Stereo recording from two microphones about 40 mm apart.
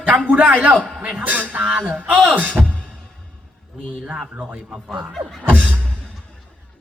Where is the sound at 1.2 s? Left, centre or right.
Right.